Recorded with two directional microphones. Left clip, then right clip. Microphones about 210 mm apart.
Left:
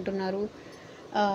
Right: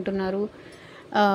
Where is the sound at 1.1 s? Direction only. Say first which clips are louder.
Right 6 dB; 30° right (ahead or behind).